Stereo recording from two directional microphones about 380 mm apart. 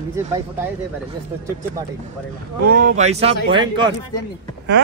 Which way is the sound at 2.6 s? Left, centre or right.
Right.